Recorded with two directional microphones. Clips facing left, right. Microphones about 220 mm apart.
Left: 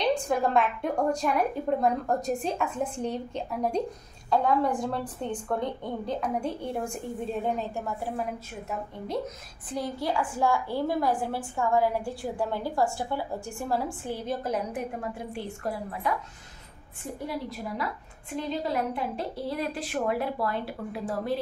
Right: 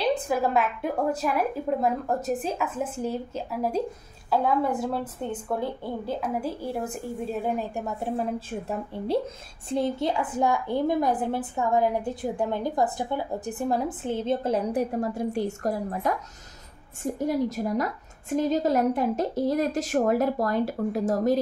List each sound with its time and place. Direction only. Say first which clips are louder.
0.3 s a woman's voice: even; 5° right (ahead or behind); by 21.4 s 40° right (ahead or behind)